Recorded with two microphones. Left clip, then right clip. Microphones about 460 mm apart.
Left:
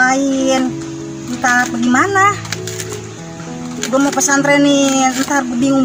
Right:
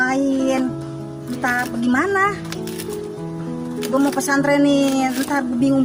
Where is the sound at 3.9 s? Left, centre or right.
Right.